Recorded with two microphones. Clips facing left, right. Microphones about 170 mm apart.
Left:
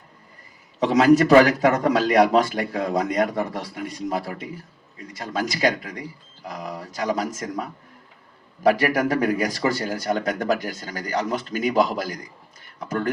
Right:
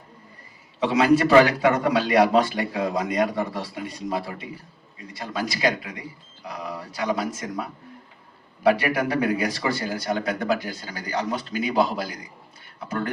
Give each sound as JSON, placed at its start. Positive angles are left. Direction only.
{"t": 0.8, "sound": "a man's voice", "side_deg": 45}
{"t": 8.6, "sound": "a man's voice", "side_deg": 45}